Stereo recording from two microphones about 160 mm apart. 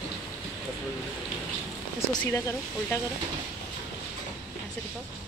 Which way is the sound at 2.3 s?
20° left (ahead or behind).